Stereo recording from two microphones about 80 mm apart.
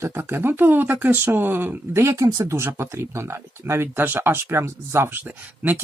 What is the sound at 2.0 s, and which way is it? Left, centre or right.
Speech, right.